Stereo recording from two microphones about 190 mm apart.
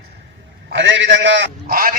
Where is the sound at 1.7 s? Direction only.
50° right (ahead or behind).